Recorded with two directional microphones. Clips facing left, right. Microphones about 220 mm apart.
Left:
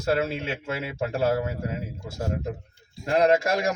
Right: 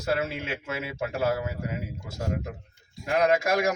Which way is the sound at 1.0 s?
30° left (ahead or behind).